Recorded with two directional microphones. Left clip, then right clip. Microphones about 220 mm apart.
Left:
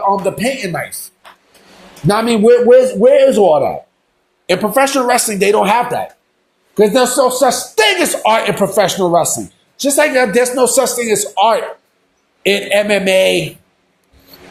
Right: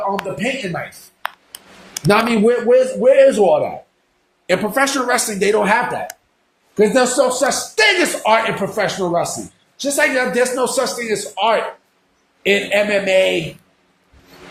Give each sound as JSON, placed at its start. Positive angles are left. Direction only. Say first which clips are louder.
{"t": 0.0, "sound": "a man's voice", "louder": "left 6 dB", "side_deg": 40}
{"t": 2.0, "sound": "speech", "louder": "left 4 dB", "side_deg": 30}
{"t": 4.4, "sound": "a man's voice", "louder": "left 4 dB", "side_deg": 25}